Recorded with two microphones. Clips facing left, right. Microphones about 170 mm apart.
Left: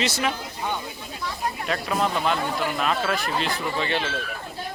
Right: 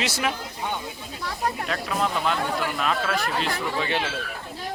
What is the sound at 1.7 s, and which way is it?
Speech, centre (ahead or behind).